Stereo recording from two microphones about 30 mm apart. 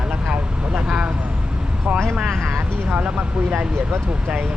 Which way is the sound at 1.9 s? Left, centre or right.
Right.